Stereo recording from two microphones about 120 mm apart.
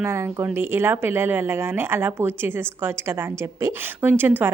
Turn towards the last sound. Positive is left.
turn(degrees=-15)  # may be behind; listen again after turning